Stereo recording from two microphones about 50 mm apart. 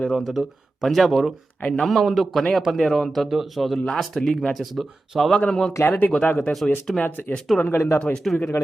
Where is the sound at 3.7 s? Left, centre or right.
Centre.